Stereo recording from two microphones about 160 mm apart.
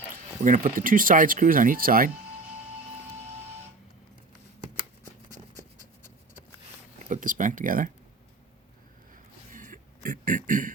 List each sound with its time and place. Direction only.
0.4 s speech: 55° right (ahead or behind)
7.1 s speech: 55° right (ahead or behind)
9.5 s a sound: 55° right (ahead or behind)